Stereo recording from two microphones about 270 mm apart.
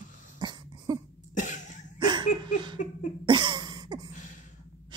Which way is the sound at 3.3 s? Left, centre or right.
Centre.